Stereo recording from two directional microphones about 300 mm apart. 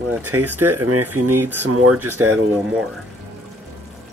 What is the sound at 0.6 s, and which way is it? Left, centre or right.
Speech, right.